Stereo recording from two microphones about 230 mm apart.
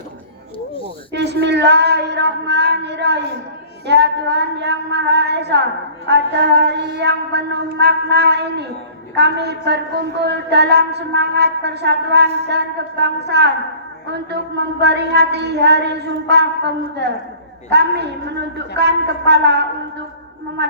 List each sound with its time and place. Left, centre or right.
1.1 s a woman's voice: right
14.8 s a woman's voice: right